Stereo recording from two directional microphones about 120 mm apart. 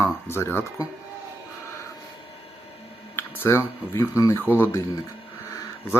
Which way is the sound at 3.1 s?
20° left (ahead or behind).